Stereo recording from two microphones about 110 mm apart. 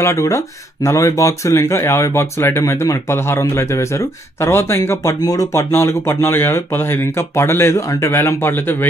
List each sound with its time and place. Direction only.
0.0 s speech: 25° left (ahead or behind)